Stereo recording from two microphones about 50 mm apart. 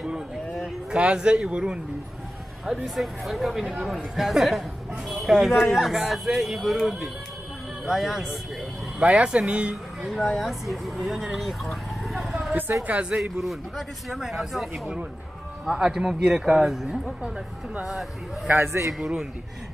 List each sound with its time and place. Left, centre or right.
0.9 s speech: right
3.0 s speech: centre
9.0 s speech: right
10.0 s speech: centre
11.3 s a sound: centre
12.8 s speech: right
13.2 s speech: centre
15.7 s speech: centre
18.5 s a man's voice: right
18.9 s speech: centre